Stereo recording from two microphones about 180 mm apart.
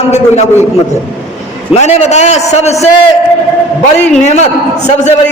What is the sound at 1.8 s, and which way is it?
A man's voice, 40° left (ahead or behind).